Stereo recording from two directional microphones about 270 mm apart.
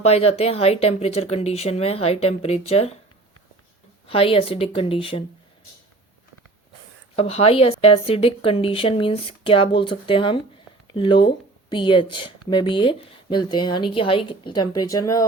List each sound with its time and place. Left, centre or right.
0.0 s a woman's voice: left
4.0 s a woman's voice: left
7.2 s a woman's voice: left